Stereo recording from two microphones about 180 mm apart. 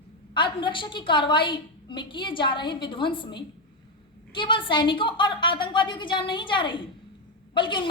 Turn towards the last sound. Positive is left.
turn(degrees=25)  # may be behind; listen again after turning